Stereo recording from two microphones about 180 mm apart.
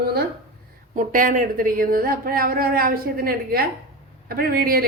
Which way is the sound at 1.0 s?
50° right (ahead or behind).